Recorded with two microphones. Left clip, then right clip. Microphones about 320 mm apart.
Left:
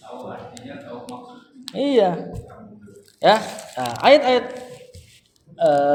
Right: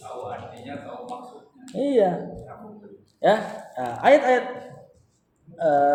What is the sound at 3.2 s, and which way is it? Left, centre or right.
A man's voice, left.